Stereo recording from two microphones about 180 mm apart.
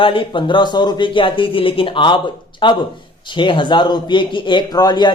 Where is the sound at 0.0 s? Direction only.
30° left (ahead or behind).